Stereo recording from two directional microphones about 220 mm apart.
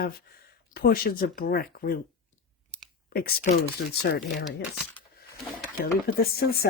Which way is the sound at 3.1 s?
45° left (ahead or behind).